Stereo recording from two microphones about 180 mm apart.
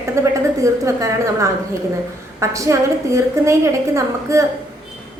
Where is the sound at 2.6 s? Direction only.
15° right (ahead or behind).